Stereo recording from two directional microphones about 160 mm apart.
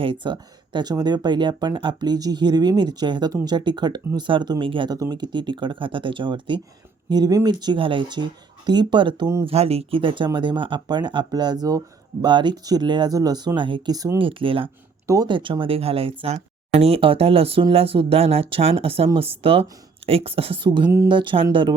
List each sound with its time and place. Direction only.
0.0 s speech: 30° right (ahead or behind)
15.0 s speech: 20° right (ahead or behind)